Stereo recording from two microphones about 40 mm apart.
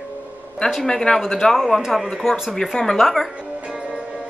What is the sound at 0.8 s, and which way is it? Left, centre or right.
Speech, centre.